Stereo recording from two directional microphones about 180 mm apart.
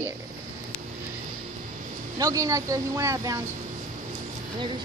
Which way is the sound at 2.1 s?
20° right (ahead or behind).